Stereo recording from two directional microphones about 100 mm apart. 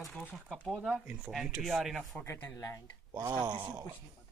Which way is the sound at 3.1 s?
40° right (ahead or behind).